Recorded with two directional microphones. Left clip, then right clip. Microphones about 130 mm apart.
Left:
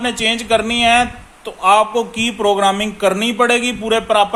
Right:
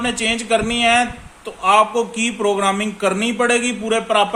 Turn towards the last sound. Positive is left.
turn(degrees=40)  # may be behind; listen again after turning